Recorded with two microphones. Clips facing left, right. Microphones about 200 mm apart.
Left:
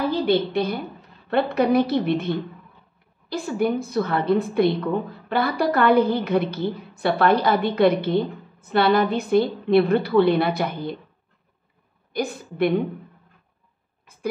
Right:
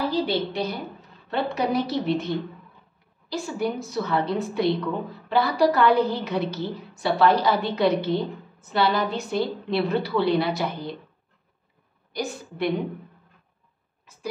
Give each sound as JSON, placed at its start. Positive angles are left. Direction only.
{"t": 0.1, "sound": "a woman's voice", "side_deg": 55}
{"t": 12.1, "sound": "a woman's voice", "side_deg": 55}